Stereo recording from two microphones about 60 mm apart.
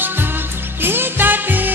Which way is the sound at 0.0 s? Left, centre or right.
Right.